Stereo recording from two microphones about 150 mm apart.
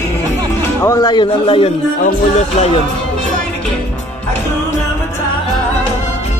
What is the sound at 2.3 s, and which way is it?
Music, 45° left (ahead or behind).